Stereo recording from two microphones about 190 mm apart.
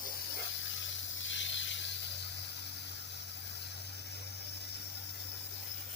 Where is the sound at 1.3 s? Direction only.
75° left (ahead or behind).